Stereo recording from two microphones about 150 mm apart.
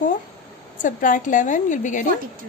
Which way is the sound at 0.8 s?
60° left (ahead or behind).